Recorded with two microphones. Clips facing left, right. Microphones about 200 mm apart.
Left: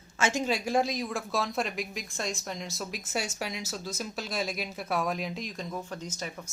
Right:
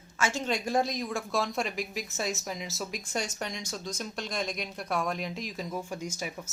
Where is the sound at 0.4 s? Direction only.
5° left (ahead or behind).